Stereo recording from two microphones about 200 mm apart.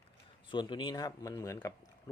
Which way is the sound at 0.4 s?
25° left (ahead or behind).